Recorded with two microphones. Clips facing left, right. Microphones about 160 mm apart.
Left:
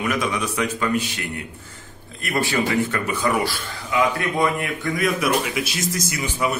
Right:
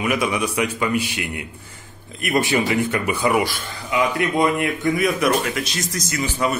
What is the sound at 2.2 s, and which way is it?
Speech, 20° right (ahead or behind).